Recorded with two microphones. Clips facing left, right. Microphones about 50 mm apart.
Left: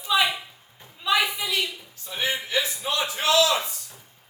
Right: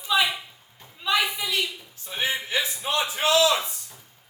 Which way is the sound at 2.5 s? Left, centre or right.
Right.